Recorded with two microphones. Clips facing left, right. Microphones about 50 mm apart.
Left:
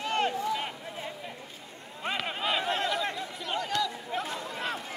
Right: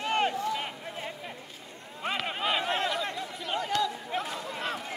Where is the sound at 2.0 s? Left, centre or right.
Centre.